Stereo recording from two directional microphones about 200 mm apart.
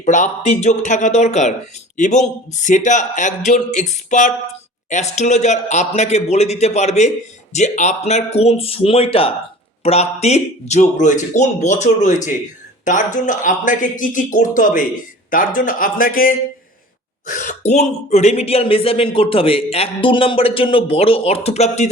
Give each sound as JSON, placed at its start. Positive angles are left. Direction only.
{"t": 0.0, "sound": "speech", "side_deg": 35}